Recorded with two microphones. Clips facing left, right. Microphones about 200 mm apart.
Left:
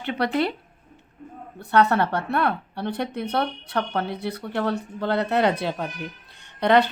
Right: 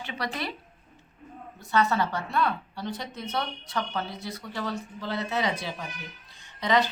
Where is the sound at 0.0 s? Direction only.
60° left (ahead or behind).